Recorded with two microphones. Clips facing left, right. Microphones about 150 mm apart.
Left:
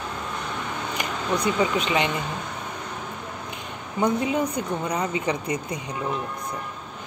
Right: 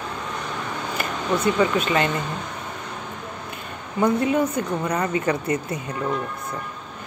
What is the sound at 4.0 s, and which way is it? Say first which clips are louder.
Speech: right 3 dB; 15° left (ahead or behind).